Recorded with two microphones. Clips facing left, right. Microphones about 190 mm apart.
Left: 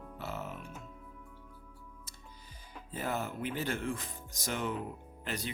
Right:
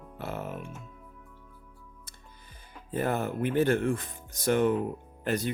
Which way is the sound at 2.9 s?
55° right (ahead or behind).